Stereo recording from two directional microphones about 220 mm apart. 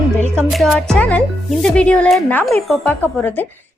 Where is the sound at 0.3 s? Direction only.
Centre (ahead or behind).